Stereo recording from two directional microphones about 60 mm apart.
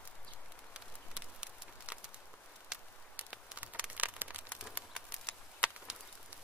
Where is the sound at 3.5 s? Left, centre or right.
Right.